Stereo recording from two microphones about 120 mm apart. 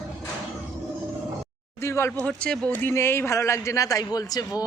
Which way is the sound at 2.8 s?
20° left (ahead or behind).